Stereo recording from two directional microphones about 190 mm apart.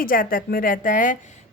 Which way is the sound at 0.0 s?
50° left (ahead or behind).